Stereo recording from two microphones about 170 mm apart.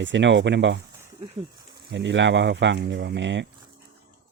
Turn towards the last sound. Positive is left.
turn(degrees=-90)